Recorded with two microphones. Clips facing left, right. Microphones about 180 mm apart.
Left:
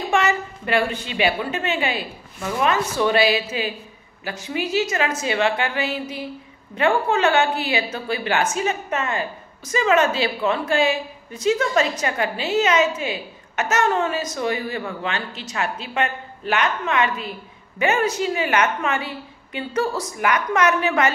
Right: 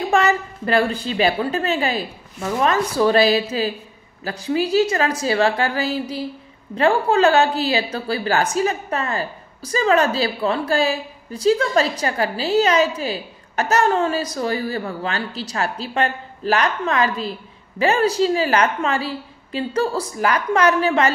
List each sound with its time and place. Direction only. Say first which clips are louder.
0.1 s a woman's voice: right 2 dB; 35° right (ahead or behind)